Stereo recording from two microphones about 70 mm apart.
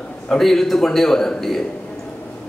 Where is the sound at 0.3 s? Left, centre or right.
Centre.